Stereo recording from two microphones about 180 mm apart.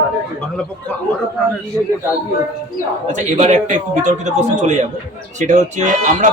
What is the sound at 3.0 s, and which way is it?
A man's voice, 40° right (ahead or behind).